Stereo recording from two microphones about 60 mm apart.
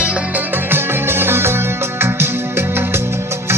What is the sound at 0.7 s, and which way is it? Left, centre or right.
Music, right.